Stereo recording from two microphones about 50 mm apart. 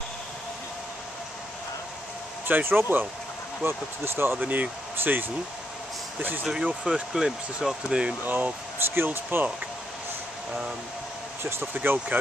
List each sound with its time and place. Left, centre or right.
2.4 s speech: right
4.4 s speech: right
6.8 s speech: centre
8.2 s speech: right
11.4 s speech: right